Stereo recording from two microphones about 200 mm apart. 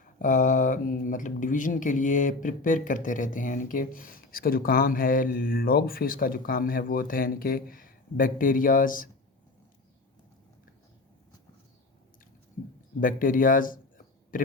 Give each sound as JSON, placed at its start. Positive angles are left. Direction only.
{"t": 0.2, "sound": "speech", "side_deg": 40}
{"t": 13.0, "sound": "speech", "side_deg": 45}